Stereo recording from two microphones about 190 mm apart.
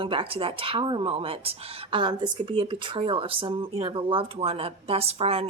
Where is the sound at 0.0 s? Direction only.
30° right (ahead or behind).